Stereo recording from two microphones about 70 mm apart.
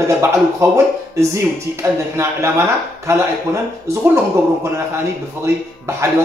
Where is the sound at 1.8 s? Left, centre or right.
Right.